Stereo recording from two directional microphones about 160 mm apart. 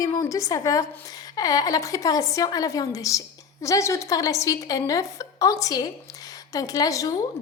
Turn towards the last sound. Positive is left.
turn(degrees=20)  # may be behind; listen again after turning